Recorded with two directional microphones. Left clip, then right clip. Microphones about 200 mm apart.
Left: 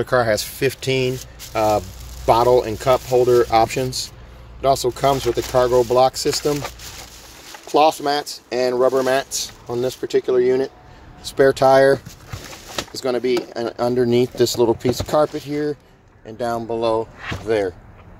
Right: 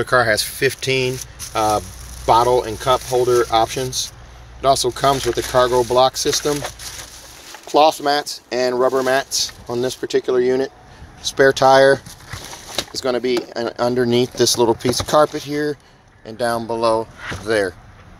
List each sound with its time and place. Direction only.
0.0 s speech: 10° left (ahead or behind)
4.6 s speech: 5° left (ahead or behind)
7.6 s speech: 5° left (ahead or behind)
16.3 s speech: 10° right (ahead or behind)